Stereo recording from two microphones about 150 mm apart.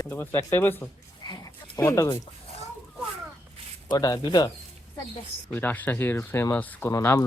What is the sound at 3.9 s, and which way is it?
Speech, 25° left (ahead or behind).